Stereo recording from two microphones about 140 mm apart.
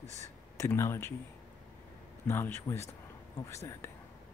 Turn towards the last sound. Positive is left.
turn(degrees=20)  # may be behind; listen again after turning